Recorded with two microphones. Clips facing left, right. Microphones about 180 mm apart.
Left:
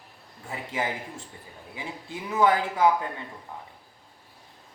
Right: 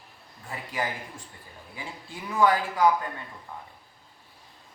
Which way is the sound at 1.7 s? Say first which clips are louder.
Left 4 dB; 20° left (ahead or behind).